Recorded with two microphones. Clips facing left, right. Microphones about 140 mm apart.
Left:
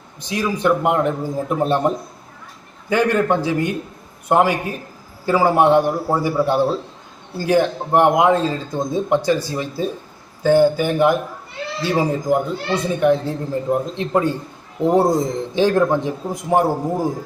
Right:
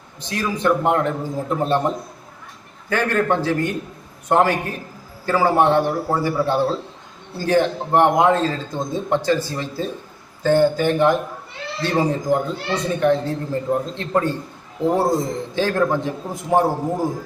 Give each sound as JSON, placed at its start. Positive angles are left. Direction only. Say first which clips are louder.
{"t": 0.2, "sound": "speech", "louder": "left 2 dB", "side_deg": 15}
{"t": 2.9, "sound": "speech", "louder": "left 3 dB", "side_deg": 15}